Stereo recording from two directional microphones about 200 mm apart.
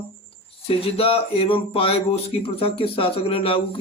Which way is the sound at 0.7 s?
30° left (ahead or behind).